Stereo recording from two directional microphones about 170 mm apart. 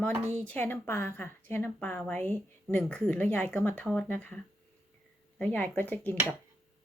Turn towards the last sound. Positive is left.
turn(degrees=10)  # may be behind; listen again after turning